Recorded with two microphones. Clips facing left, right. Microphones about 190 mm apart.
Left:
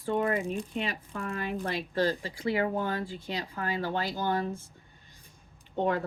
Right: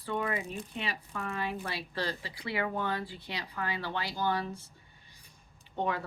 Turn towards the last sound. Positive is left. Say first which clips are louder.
# left 5 dB
turn(degrees=45)  # may be behind; listen again after turning